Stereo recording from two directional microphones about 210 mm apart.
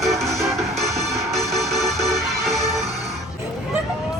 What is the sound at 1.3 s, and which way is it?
Music, centre (ahead or behind).